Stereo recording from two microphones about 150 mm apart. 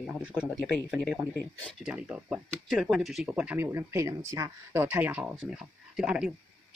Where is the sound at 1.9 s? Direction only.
10° right (ahead or behind).